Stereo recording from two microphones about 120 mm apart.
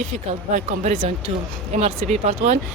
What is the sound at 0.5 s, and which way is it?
Speech, 90° right.